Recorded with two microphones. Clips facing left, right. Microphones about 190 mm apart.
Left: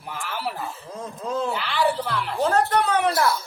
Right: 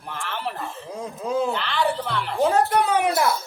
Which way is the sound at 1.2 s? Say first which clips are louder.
Right 3 dB; 10° right (ahead or behind).